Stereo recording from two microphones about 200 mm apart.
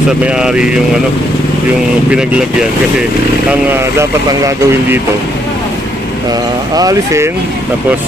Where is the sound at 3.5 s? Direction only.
10° right (ahead or behind).